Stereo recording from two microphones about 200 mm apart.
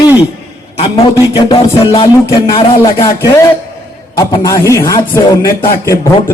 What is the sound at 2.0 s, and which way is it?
A man's voice, 25° left (ahead or behind).